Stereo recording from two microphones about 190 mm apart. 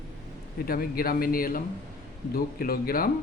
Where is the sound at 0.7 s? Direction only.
50° left (ahead or behind).